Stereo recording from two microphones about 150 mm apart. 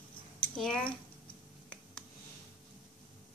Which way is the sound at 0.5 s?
5° left (ahead or behind).